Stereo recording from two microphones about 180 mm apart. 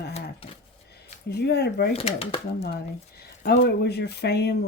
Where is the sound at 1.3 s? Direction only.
65° left (ahead or behind).